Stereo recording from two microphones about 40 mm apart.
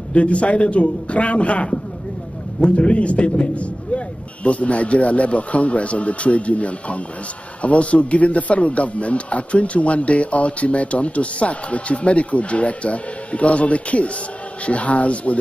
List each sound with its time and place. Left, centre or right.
0.1 s speech: left